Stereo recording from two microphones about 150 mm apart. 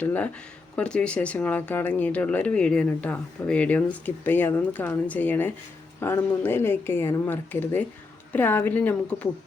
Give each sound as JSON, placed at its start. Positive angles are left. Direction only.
{"t": 0.0, "sound": "speech", "side_deg": 10}